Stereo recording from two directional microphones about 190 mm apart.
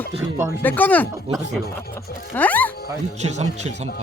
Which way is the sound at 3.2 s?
35° right (ahead or behind).